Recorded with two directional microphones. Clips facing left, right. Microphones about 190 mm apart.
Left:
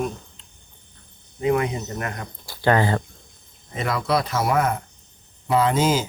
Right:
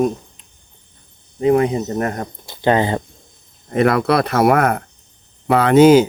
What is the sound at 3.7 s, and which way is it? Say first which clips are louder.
Speech: right 8 dB; 60° right (ahead or behind).